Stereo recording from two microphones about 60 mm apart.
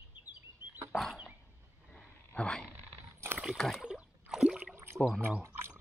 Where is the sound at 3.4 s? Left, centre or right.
Centre.